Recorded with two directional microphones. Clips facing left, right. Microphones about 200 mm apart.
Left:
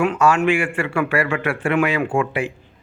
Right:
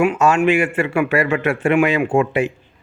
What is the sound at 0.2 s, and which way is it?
Speech, 25° right (ahead or behind).